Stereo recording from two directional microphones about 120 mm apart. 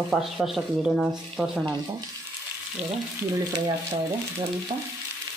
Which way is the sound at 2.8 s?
75° right (ahead or behind).